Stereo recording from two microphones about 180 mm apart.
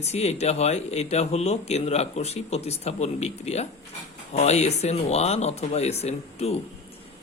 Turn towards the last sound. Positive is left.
turn(degrees=35)  # may be behind; listen again after turning